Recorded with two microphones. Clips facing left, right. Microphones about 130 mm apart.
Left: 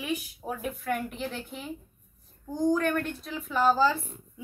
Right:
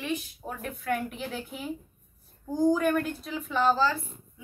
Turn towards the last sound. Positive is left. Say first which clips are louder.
# left 1 dB
turn(degrees=15)  # may be behind; listen again after turning